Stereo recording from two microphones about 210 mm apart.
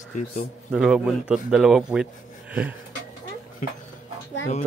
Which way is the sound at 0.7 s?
5° right (ahead or behind).